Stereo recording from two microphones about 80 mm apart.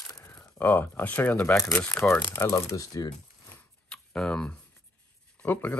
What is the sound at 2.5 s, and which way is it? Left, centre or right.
Speech, left.